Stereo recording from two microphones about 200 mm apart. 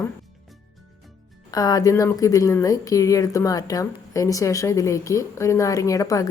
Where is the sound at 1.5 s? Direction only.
20° left (ahead or behind).